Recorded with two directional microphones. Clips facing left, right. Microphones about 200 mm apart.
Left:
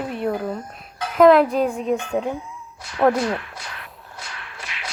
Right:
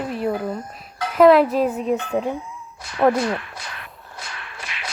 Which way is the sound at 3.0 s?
Centre (ahead or behind).